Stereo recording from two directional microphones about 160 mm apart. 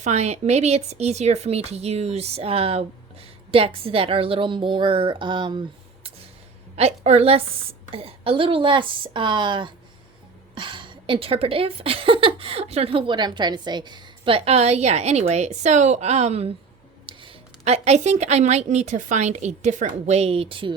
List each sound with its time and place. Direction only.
0.0 s a woman's voice: 45° right (ahead or behind)
6.7 s a woman's voice: 40° right (ahead or behind)